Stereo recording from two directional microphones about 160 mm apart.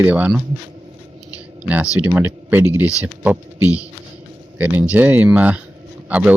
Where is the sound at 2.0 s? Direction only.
10° right (ahead or behind).